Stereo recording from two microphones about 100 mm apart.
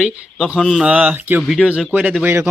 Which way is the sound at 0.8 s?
15° right (ahead or behind).